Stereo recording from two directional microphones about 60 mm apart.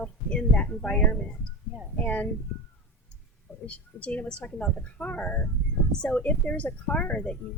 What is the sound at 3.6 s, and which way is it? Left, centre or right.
A woman's voice, left.